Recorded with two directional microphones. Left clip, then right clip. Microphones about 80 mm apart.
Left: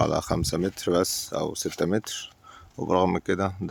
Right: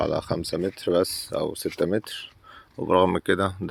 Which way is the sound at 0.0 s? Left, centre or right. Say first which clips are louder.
Left 1 dB; left.